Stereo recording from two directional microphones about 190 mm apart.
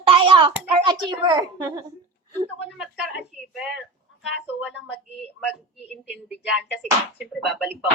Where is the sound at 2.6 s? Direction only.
5° right (ahead or behind).